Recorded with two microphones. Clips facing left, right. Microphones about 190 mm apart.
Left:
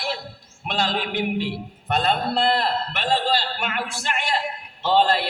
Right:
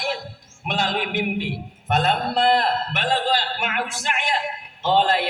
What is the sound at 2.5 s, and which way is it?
A man's voice, 15° right (ahead or behind).